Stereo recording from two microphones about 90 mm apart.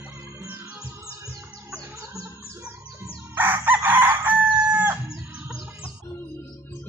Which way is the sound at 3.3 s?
20° right (ahead or behind).